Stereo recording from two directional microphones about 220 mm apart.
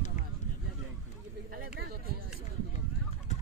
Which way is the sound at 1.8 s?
45° right (ahead or behind).